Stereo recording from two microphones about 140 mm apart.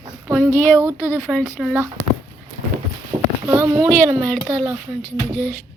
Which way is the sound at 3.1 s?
35° right (ahead or behind).